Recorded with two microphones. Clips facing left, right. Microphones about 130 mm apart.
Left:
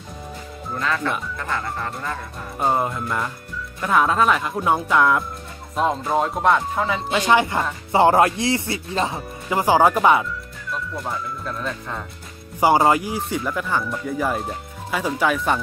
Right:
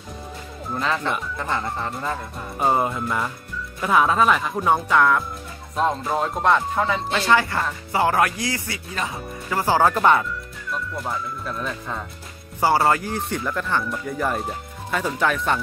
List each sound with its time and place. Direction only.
0.7 s speech: 20° right (ahead or behind)
2.6 s speech: centre (ahead or behind)
7.2 s speech: 20° left (ahead or behind)
9.5 s speech: 15° left (ahead or behind); by 12.0 s centre (ahead or behind)
12.5 s speech: 15° left (ahead or behind)